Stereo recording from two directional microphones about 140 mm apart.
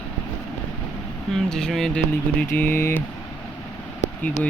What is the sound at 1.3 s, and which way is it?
Speech, 5° left (ahead or behind).